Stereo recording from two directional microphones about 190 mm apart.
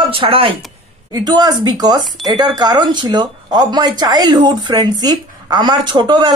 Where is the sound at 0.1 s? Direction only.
30° right (ahead or behind).